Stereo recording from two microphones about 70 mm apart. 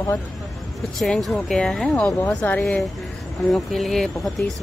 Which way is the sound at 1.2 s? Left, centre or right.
Centre.